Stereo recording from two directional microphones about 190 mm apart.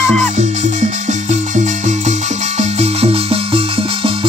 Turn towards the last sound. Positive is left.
turn(degrees=-30)  # may be behind; listen again after turning